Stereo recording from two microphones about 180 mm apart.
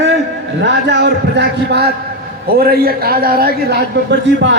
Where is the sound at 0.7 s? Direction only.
75° right (ahead or behind).